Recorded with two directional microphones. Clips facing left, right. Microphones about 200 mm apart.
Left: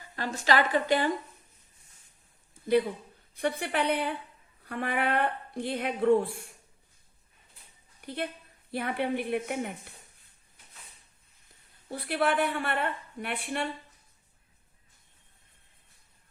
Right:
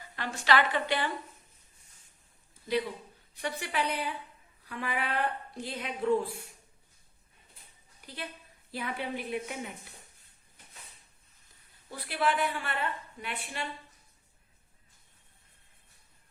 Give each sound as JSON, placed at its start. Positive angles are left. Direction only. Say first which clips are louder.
{"t": 0.2, "sound": "a woman's voice", "louder": "left 1 dB", "side_deg": 40}
{"t": 3.3, "sound": "a woman's voice", "louder": "left 4 dB", "side_deg": 55}
{"t": 8.0, "sound": "a woman's voice", "louder": "left 8 dB", "side_deg": 55}
{"t": 11.9, "sound": "a woman's voice", "louder": "left 3 dB", "side_deg": 55}